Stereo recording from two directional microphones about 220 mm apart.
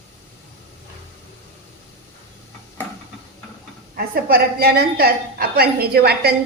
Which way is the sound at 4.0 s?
45° right (ahead or behind).